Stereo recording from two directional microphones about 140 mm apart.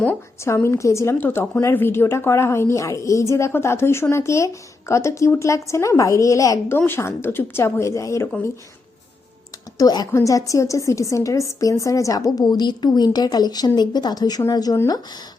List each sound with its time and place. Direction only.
0.0 s a woman's voice: 15° left (ahead or behind)
9.7 s a woman's voice: 30° left (ahead or behind)